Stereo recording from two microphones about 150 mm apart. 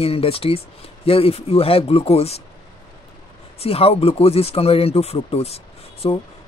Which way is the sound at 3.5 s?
40° left (ahead or behind).